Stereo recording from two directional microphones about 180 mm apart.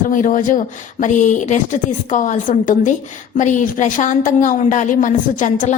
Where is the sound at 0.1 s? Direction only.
45° left (ahead or behind).